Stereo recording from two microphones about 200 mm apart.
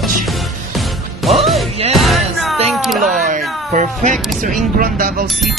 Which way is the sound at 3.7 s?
40° right (ahead or behind).